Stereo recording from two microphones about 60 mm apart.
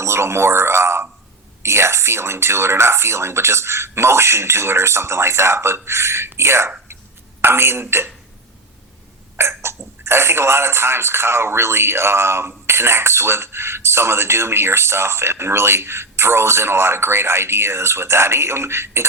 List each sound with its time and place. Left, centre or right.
0.0 s speech: right
9.4 s speech: right